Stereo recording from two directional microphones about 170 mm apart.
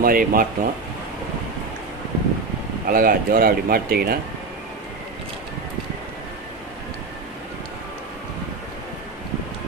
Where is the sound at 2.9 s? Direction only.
55° right (ahead or behind).